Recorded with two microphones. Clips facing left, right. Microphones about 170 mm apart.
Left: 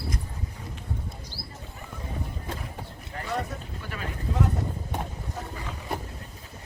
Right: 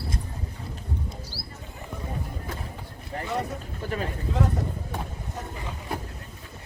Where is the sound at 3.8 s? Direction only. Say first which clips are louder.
Right 9 dB; 40° right (ahead or behind).